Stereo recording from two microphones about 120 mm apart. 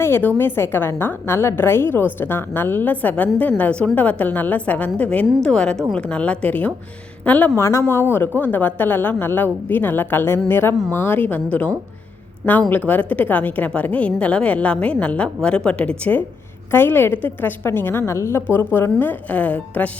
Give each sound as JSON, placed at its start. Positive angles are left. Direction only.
{"t": 0.0, "sound": "a woman's voice", "side_deg": 15}
{"t": 12.9, "sound": "a woman's voice", "side_deg": 15}